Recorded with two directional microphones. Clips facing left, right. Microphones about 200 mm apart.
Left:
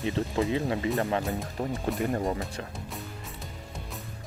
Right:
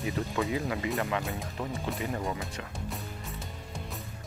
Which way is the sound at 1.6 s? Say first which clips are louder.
Left 4 dB; 40° left (ahead or behind).